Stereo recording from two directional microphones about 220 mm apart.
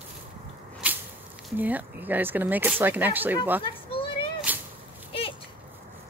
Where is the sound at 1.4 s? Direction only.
5° right (ahead or behind).